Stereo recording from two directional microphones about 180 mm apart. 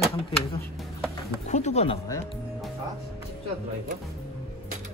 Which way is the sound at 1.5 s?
40° left (ahead or behind).